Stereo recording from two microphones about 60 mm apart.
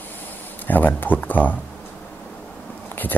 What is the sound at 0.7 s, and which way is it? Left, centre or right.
Speech, left.